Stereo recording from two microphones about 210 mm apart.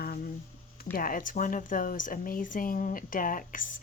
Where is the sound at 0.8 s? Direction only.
45° left (ahead or behind).